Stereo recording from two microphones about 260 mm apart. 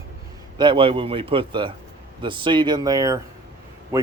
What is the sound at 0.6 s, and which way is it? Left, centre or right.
A man's voice, centre.